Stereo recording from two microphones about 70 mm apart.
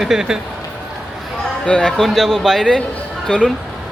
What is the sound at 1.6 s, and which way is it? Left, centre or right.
Speech, centre.